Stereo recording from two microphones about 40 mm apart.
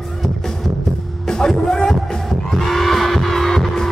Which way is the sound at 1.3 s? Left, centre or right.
Centre.